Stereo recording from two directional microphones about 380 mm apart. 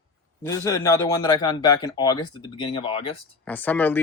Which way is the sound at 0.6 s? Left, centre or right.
Centre.